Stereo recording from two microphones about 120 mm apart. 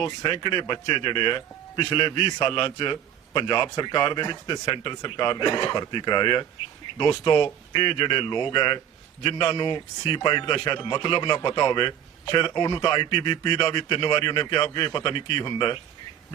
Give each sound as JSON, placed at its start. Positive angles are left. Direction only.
{"t": 0.0, "sound": "speech", "side_deg": 40}